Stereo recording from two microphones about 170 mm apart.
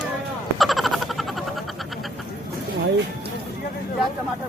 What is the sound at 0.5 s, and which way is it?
Frog, centre (ahead or behind).